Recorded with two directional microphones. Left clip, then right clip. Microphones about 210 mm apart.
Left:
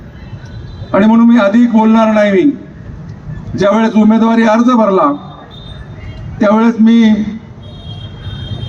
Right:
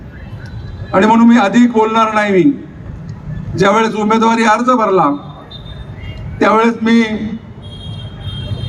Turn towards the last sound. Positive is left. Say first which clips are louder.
# left 2 dB
turn(degrees=-45)  # may be behind; listen again after turning